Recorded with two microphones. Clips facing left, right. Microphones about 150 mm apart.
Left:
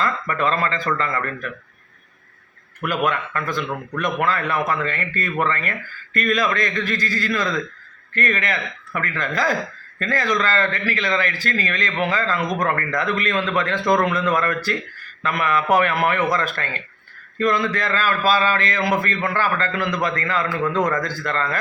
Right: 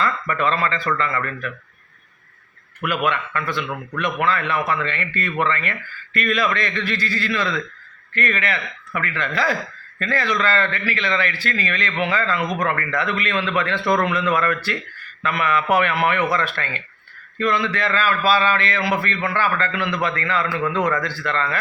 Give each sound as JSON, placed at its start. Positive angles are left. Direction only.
{"t": 0.0, "sound": "speech", "side_deg": 40}
{"t": 2.8, "sound": "speech", "side_deg": 40}